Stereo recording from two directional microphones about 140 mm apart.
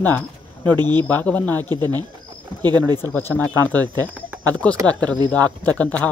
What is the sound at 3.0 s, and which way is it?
Speech, 15° left (ahead or behind).